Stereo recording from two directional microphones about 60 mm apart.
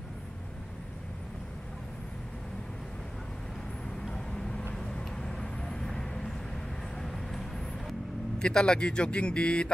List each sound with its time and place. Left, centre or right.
4.1 s vehicle: centre
8.4 s speech: centre